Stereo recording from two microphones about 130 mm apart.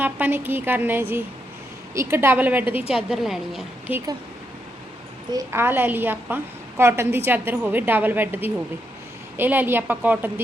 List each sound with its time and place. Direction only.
0.0 s a woman's voice: 15° right (ahead or behind)
2.9 s a woman's voice: 5° right (ahead or behind)
3.9 s a woman's voice: 15° right (ahead or behind)
5.3 s a woman's voice: 25° right (ahead or behind)